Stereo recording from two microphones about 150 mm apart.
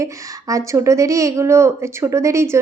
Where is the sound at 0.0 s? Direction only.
20° right (ahead or behind).